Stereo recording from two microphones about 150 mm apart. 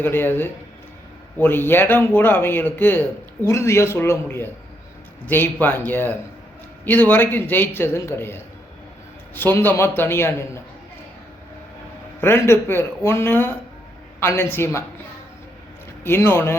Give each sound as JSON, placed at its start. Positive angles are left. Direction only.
{"t": 0.0, "sound": "a man's voice", "side_deg": 15}
{"t": 12.2, "sound": "a man's voice", "side_deg": 15}
{"t": 16.0, "sound": "a man's voice", "side_deg": 15}